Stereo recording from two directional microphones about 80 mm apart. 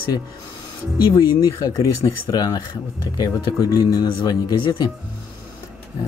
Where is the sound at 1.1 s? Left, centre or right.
Left.